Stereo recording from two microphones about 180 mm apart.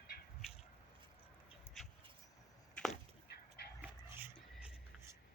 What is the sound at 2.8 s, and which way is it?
Chop, 5° left (ahead or behind).